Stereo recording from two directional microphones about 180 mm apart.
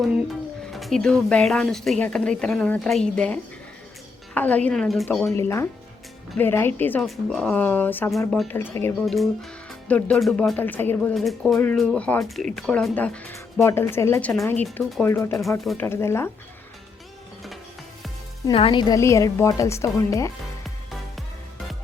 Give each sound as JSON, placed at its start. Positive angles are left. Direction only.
{"t": 0.6, "sound": "speech", "side_deg": 0}
{"t": 4.4, "sound": "speech", "side_deg": 10}
{"t": 5.4, "sound": "speech", "side_deg": 15}
{"t": 8.5, "sound": "speech", "side_deg": 10}
{"t": 18.4, "sound": "speech", "side_deg": 30}
{"t": 20.7, "sound": "music", "side_deg": 0}